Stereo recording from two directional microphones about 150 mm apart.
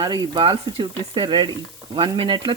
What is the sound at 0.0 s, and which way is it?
Speech, 30° right (ahead or behind).